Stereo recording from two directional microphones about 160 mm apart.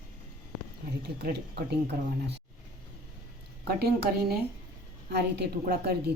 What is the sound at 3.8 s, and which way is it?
A woman's voice, 85° right.